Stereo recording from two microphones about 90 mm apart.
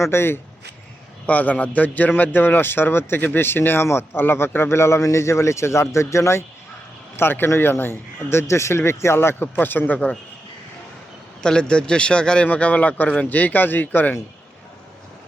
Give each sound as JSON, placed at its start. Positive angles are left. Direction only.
{"t": 0.0, "sound": "a man's voice", "side_deg": 25}
{"t": 1.3, "sound": "a man's voice", "side_deg": 15}
{"t": 11.4, "sound": "a man's voice", "side_deg": 10}